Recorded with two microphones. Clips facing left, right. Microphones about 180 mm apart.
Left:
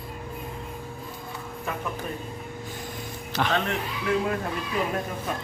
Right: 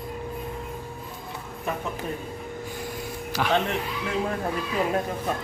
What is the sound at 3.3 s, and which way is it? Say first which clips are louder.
Speech: right 1 dB; 10° right (ahead or behind).